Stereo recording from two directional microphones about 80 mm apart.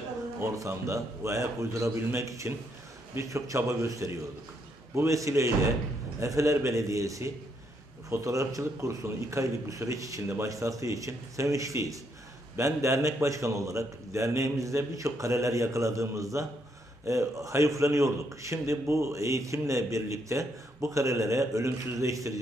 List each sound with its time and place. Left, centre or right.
0.4 s a man's voice: right